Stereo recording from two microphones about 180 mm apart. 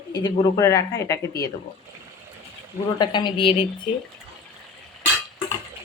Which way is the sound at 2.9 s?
25° left (ahead or behind).